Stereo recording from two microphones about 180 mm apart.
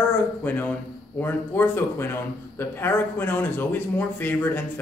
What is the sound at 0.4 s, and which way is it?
Speech, 10° left (ahead or behind).